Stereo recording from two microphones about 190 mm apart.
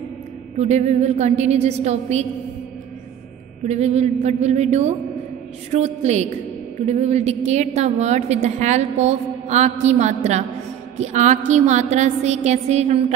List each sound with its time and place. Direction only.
0.6 s a woman's voice: 35° right (ahead or behind)
3.6 s a woman's voice: 35° right (ahead or behind)